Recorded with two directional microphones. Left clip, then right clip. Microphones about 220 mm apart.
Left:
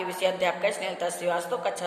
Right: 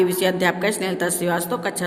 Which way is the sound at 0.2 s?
50° right (ahead or behind).